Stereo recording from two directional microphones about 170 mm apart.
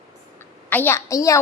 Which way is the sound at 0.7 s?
10° left (ahead or behind).